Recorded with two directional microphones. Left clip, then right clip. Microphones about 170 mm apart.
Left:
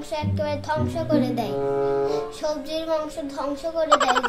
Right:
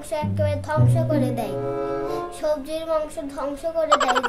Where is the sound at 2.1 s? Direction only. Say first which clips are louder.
Right 1 dB; 20° right (ahead or behind).